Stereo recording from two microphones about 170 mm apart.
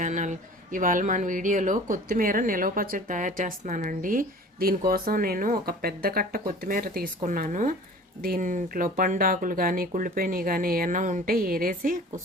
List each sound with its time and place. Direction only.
0.0 s speech: 45° right (ahead or behind)